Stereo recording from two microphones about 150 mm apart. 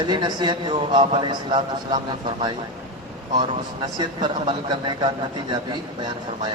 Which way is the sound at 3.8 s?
30° right (ahead or behind).